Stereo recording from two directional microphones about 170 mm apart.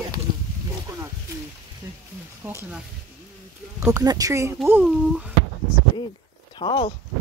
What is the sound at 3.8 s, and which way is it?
Speech, 20° right (ahead or behind).